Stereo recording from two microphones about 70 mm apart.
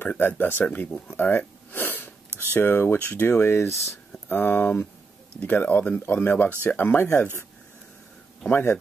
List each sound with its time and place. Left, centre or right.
0.0 s speech: left
1.0 s sniff: left
3.2 s speech: left
4.3 s speech: left
8.5 s speech: left